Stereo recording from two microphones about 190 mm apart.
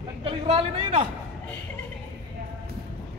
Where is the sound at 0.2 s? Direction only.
30° right (ahead or behind).